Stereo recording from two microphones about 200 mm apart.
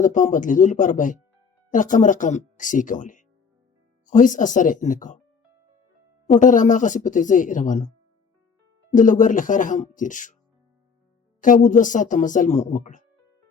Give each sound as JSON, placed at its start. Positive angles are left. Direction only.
{"t": 0.0, "sound": "speech", "side_deg": 40}
{"t": 6.2, "sound": "speech", "side_deg": 40}
{"t": 11.3, "sound": "speech", "side_deg": 40}